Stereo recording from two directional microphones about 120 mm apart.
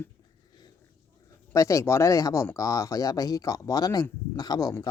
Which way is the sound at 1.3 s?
25° left (ahead or behind).